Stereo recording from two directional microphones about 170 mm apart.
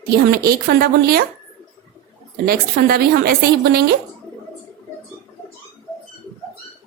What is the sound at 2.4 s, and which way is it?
A woman's voice, 65° right (ahead or behind).